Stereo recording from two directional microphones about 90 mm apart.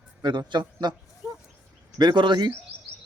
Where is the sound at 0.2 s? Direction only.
55° right (ahead or behind).